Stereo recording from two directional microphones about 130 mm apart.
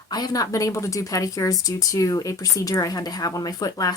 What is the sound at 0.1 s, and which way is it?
Speech, 30° left (ahead or behind).